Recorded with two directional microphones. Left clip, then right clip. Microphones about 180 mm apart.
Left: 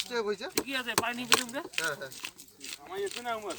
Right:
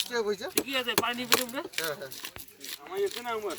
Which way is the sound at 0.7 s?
Centre (ahead or behind).